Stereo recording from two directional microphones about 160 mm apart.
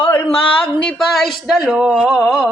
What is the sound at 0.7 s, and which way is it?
Speech, 5° left (ahead or behind).